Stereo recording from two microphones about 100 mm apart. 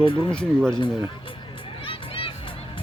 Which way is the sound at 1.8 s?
65° left (ahead or behind).